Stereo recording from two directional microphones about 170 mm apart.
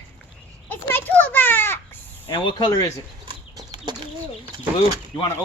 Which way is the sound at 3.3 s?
25° right (ahead or behind).